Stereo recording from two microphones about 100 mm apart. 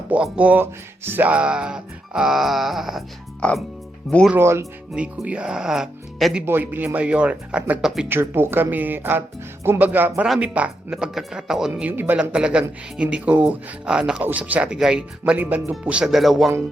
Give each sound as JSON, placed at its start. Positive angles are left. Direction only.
{"t": 0.1, "sound": "speech", "side_deg": -15}
{"t": 3.4, "sound": "speech", "side_deg": 10}
{"t": 4.4, "sound": "speech", "side_deg": -25}
{"t": 4.9, "sound": "speech", "side_deg": -10}
{"t": 6.4, "sound": "speech", "side_deg": -20}
{"t": 8.0, "sound": "speech", "side_deg": -20}
{"t": 11.7, "sound": "speech", "side_deg": -20}